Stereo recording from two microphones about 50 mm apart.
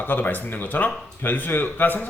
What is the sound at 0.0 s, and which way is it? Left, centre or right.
A man's voice, left.